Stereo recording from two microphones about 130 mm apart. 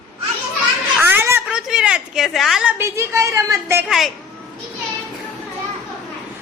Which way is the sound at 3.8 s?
Centre (ahead or behind).